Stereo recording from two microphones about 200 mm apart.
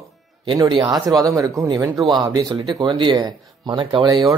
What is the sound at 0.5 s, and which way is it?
Speech, 25° right (ahead or behind).